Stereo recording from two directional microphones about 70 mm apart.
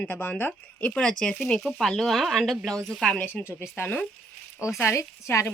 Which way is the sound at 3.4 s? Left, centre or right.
Left.